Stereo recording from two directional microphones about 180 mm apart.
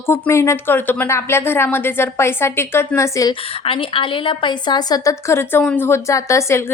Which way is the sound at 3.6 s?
30° left (ahead or behind).